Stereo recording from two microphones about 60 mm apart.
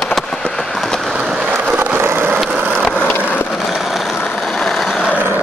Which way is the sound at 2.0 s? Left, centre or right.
Right.